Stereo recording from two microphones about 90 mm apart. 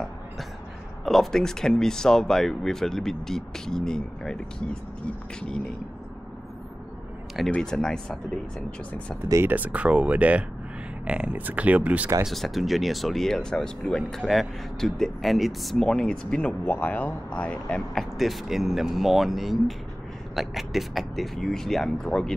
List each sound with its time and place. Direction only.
1.0 s speech: centre (ahead or behind)
7.5 s speech: 5° left (ahead or behind)
9.3 s speech: 25° right (ahead or behind)
12.3 s speech: centre (ahead or behind)